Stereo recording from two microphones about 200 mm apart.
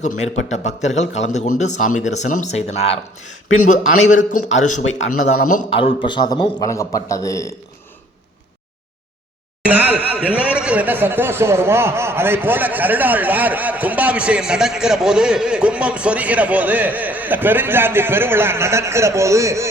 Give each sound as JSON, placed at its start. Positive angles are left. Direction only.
{"t": 0.0, "sound": "a man's voice", "side_deg": 35}
{"t": 5.8, "sound": "a man's voice", "side_deg": 25}
{"t": 9.6, "sound": "speech", "side_deg": -10}